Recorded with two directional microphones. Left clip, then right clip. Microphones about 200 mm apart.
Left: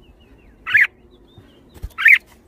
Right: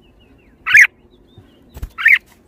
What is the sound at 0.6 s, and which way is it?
Fowl, 40° right (ahead or behind).